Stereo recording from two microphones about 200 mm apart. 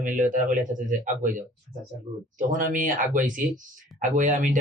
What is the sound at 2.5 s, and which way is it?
Speech, 40° right (ahead or behind).